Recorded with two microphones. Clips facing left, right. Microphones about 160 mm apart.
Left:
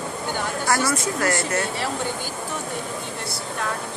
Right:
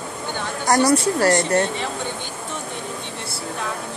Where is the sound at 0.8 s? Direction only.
35° right (ahead or behind).